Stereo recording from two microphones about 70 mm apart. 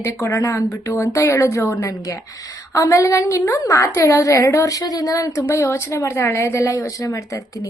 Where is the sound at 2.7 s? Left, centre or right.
Left.